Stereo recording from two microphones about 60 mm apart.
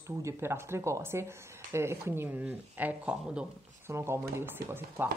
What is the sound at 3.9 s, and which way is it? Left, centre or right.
Speech, right.